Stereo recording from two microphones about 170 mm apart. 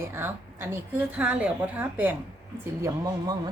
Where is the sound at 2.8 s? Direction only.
20° right (ahead or behind).